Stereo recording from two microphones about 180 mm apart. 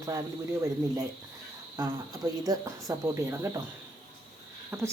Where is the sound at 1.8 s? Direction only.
20° right (ahead or behind).